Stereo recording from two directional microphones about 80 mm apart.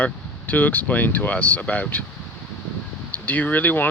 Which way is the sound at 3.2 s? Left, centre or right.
Centre.